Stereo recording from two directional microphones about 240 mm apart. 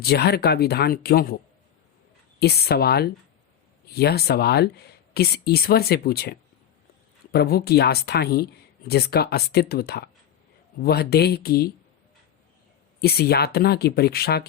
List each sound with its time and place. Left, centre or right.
0.0 s speech: left
2.4 s speech: left
13.0 s speech: left